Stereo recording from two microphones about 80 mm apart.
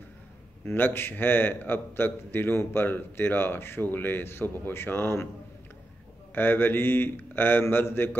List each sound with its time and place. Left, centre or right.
0.7 s a man's voice: left
6.3 s a man's voice: left